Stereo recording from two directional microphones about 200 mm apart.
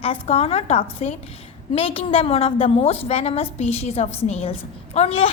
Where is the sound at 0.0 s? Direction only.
30° left (ahead or behind).